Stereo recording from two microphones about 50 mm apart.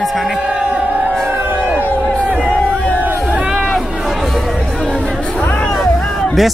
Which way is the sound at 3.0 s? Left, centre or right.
Right.